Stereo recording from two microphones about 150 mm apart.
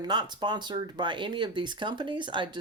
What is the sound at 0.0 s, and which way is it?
Speech, 30° right (ahead or behind).